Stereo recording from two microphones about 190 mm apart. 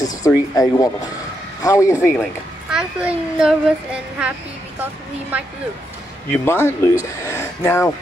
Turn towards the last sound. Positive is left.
turn(degrees=15)  # may be behind; listen again after turning